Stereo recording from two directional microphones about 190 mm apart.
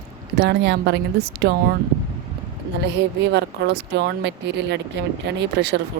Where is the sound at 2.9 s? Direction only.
65° right (ahead or behind).